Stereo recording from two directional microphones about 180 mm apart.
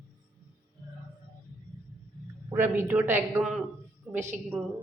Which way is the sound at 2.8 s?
10° right (ahead or behind).